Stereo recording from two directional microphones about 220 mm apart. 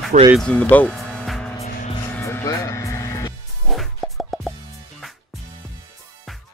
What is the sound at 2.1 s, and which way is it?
Music, 10° left (ahead or behind).